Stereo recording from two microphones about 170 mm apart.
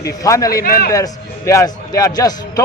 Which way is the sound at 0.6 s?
60° left (ahead or behind).